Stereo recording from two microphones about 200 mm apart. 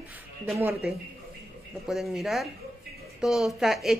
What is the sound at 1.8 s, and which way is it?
Speech, centre (ahead or behind).